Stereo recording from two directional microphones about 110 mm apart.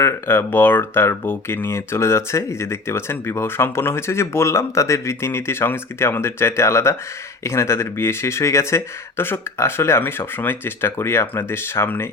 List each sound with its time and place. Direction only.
0.0 s speech: 20° left (ahead or behind)